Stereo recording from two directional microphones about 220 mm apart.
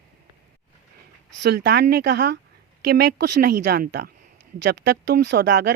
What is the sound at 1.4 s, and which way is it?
Speech, 50° right (ahead or behind).